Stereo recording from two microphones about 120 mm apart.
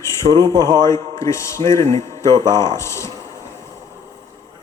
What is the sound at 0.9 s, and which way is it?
A man's voice, 25° left (ahead or behind).